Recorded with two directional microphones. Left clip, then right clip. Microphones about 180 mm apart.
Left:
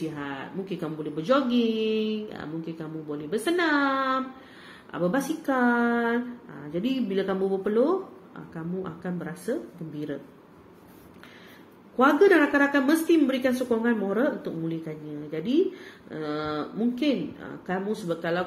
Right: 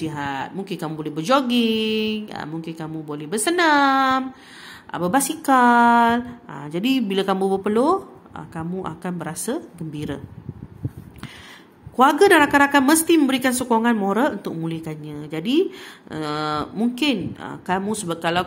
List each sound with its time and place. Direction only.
0.1 s speech: 50° right (ahead or behind)
12.0 s speech: 55° right (ahead or behind)